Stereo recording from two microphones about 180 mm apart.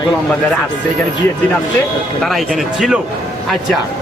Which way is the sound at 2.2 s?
Centre (ahead or behind).